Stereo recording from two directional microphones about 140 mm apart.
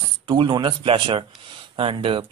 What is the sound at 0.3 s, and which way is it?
A man's voice, 35° right (ahead or behind).